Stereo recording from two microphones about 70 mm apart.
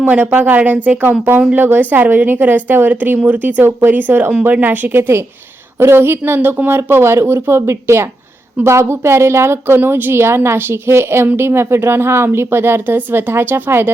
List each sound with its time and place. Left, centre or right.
0.0 s a woman's voice: right